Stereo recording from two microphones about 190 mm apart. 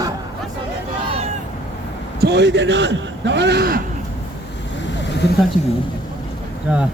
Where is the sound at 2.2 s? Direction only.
60° right (ahead or behind).